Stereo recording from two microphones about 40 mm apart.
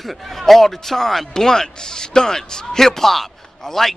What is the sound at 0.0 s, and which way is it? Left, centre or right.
Speech, centre.